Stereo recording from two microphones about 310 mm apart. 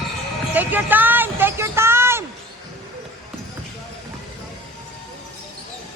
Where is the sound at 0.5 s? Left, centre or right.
Centre.